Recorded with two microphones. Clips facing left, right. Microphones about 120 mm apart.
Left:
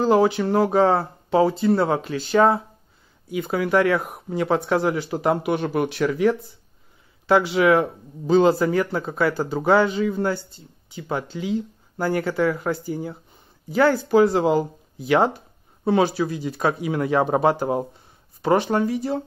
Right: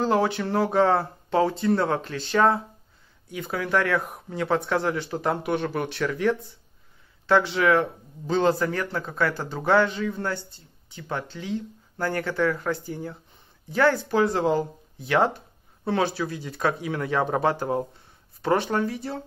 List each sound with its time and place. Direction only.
0.0 s a man's voice: 5° left (ahead or behind)